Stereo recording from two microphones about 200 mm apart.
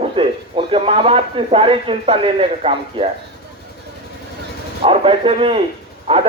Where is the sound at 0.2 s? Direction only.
25° right (ahead or behind).